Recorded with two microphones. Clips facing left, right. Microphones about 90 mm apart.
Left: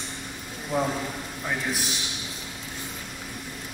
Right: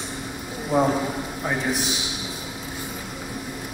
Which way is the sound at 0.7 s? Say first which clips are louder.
Right 6 dB; 20° right (ahead or behind).